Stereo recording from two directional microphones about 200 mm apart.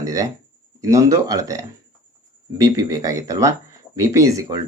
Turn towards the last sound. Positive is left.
turn(degrees=-15)  # may be behind; listen again after turning